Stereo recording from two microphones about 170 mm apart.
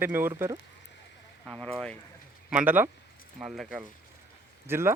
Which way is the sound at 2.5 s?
10° right (ahead or behind).